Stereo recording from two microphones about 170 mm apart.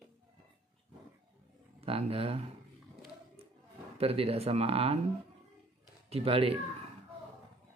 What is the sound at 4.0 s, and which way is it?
Speech, 35° right (ahead or behind).